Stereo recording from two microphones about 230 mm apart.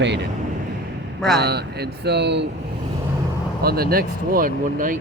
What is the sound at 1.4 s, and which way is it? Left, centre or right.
Speech, right.